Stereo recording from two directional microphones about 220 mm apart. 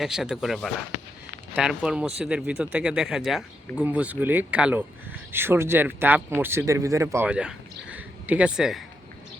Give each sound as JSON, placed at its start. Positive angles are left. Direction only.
{"t": 0.0, "sound": "speech", "side_deg": 0}